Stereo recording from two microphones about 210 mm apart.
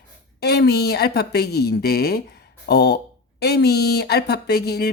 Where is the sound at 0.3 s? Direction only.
50° left (ahead or behind).